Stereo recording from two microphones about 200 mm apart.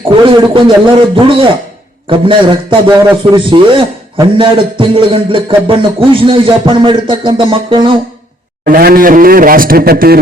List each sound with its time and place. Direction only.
0.1 s a man's voice: 25° right (ahead or behind)
8.6 s a man's voice: 45° right (ahead or behind)